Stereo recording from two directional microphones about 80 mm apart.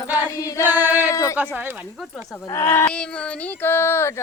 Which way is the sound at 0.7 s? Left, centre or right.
Right.